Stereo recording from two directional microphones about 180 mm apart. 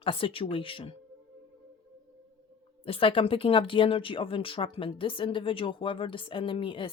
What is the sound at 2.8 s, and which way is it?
Speech, 30° left (ahead or behind).